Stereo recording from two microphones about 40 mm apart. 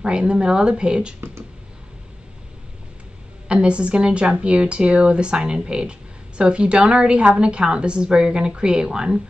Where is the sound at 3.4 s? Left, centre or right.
Right.